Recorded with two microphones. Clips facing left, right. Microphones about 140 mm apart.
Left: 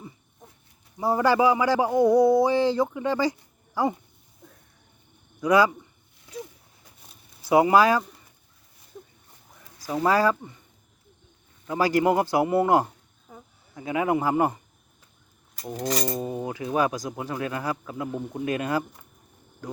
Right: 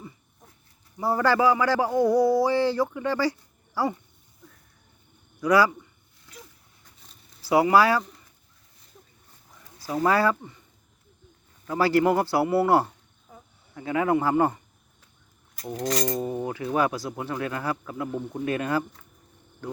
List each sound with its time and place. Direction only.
0.9 s a sound: 15° left (ahead or behind)
5.4 s speech: 20° left (ahead or behind)
7.4 s a sound: 20° left (ahead or behind)
9.8 s speech: 15° left (ahead or behind)
11.6 s speech: 15° left (ahead or behind)
15.6 s speech: centre (ahead or behind)